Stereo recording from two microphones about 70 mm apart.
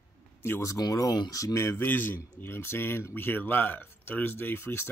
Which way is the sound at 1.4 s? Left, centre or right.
Left.